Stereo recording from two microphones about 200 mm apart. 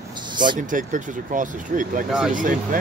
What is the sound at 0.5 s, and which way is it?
Speech, 40° right (ahead or behind).